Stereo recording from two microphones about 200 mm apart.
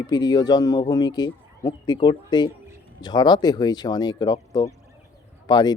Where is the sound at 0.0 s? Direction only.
20° left (ahead or behind).